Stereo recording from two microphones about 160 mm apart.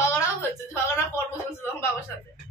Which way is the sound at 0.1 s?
15° left (ahead or behind).